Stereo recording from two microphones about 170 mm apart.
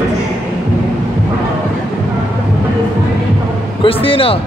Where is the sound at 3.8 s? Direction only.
35° left (ahead or behind).